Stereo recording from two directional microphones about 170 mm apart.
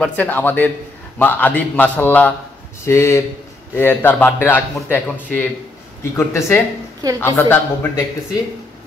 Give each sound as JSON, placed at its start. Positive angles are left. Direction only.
{"t": 0.0, "sound": "a man's voice", "side_deg": 10}